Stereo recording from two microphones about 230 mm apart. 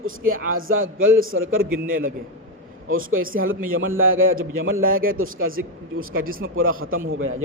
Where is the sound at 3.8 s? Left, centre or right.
Right.